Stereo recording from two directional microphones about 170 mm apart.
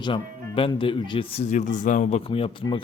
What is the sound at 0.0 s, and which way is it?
Speech, 30° left (ahead or behind).